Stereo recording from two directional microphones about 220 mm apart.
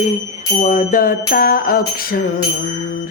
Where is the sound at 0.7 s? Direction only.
40° left (ahead or behind).